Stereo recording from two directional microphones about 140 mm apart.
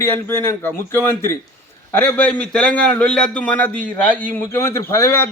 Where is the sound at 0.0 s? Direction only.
15° left (ahead or behind).